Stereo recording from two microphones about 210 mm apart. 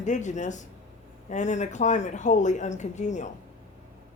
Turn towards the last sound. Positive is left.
turn(degrees=35)  # may be behind; listen again after turning